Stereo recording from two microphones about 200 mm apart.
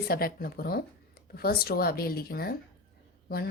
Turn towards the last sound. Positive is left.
turn(degrees=50)  # may be behind; listen again after turning